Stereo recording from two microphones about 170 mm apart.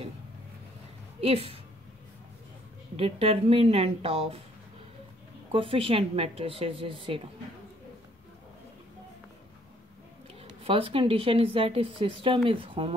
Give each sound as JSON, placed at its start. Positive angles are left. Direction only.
{"t": 1.2, "sound": "a woman's voice", "side_deg": -35}
{"t": 3.0, "sound": "a woman's voice", "side_deg": -35}
{"t": 5.5, "sound": "a woman's voice", "side_deg": -30}
{"t": 10.6, "sound": "a woman's voice", "side_deg": -30}